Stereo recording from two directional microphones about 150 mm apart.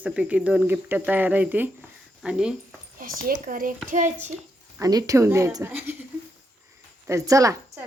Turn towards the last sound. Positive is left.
turn(degrees=-20)  # may be behind; listen again after turning